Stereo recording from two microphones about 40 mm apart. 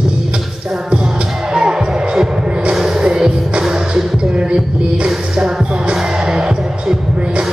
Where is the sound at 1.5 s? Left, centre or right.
Right.